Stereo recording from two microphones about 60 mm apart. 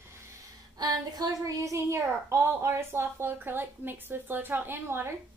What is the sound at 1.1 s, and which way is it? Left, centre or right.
A woman's voice, right.